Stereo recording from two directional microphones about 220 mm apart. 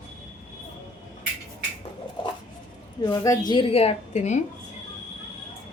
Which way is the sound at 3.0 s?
15° left (ahead or behind).